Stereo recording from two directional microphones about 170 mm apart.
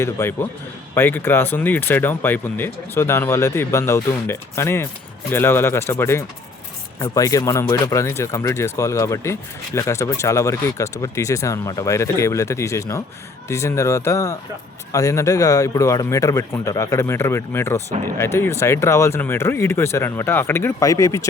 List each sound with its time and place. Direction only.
0.0 s speech: 15° left (ahead or behind)